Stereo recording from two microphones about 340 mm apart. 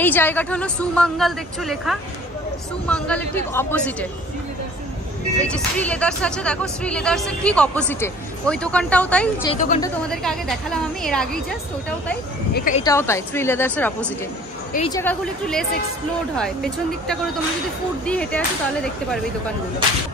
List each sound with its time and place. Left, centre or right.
0.0 s speech: centre
5.4 s speech: centre
9.5 s speech: left
9.8 s speech: centre
12.5 s speech: left
12.8 s a woman's voice: centre